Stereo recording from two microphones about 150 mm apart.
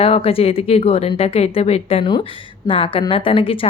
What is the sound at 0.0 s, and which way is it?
A woman's voice, 40° left (ahead or behind).